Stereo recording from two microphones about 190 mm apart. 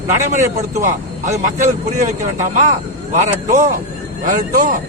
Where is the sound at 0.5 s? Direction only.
40° right (ahead or behind).